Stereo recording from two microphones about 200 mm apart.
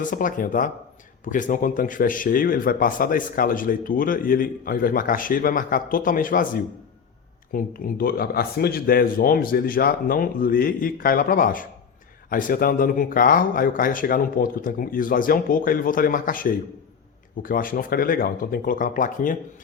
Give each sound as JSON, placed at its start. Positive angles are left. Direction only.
{"t": 0.0, "sound": "speech", "side_deg": 40}